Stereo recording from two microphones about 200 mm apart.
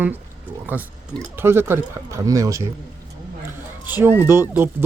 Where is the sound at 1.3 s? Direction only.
10° right (ahead or behind).